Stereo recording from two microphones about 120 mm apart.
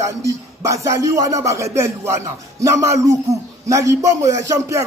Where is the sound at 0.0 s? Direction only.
25° right (ahead or behind).